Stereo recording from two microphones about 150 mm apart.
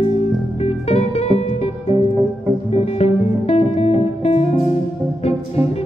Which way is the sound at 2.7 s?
45° left (ahead or behind).